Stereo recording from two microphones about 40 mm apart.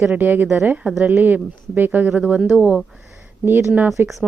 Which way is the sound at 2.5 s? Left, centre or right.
Right.